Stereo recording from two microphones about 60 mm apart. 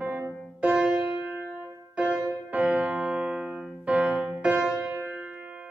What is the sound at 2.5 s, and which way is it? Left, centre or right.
Piano, right.